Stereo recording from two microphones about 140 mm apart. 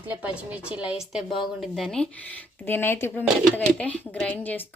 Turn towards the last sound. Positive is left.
turn(degrees=10)  # may be behind; listen again after turning